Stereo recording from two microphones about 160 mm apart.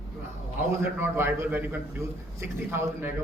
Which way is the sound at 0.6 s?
15° right (ahead or behind).